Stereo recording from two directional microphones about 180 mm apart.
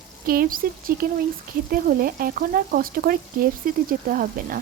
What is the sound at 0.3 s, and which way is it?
A woman's voice, 55° right (ahead or behind).